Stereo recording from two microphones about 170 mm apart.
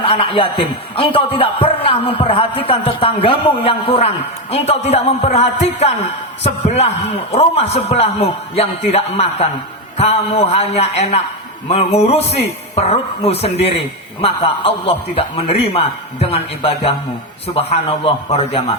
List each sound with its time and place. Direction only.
0.0 s a man's voice: 30° left (ahead or behind)